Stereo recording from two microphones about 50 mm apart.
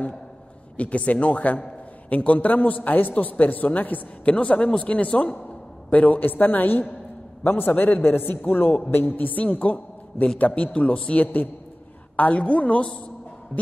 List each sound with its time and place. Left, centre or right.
0.7 s a man's voice: left